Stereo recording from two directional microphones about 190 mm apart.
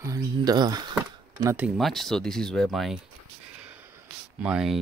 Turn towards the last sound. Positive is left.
turn(degrees=-5)  # may be behind; listen again after turning